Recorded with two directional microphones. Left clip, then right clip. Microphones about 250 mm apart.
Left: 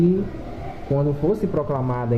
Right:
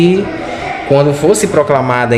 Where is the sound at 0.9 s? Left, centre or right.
Right.